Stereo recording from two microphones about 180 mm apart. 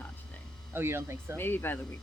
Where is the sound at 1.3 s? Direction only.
10° left (ahead or behind).